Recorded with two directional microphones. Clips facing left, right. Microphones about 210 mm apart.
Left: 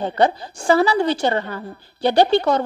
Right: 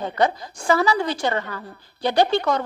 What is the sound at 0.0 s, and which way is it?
A woman's voice, 30° left (ahead or behind).